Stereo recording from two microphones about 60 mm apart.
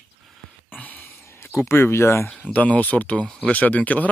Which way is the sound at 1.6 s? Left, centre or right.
Left.